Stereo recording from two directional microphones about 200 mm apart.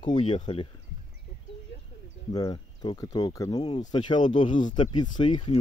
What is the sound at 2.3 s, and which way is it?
Speech, 20° left (ahead or behind).